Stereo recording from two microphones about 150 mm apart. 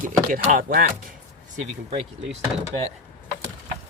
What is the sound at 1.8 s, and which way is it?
Speech, 40° right (ahead or behind).